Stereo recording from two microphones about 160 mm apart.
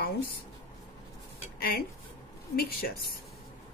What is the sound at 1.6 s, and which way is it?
A woman's voice, 70° left (ahead or behind).